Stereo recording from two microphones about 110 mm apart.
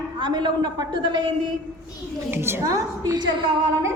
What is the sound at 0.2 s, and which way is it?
A woman's voice, 45° right (ahead or behind).